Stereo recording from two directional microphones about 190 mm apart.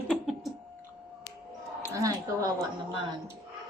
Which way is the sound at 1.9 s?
20° right (ahead or behind).